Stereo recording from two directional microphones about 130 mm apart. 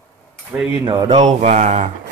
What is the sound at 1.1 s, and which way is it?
Speech, 60° right (ahead or behind).